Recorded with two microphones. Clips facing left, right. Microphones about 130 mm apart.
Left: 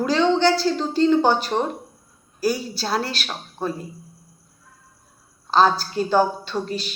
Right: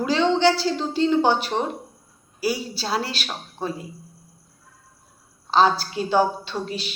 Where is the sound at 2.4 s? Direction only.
10° right (ahead or behind).